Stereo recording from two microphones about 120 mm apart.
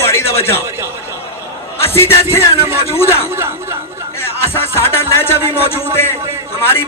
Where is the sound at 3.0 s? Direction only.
20° left (ahead or behind).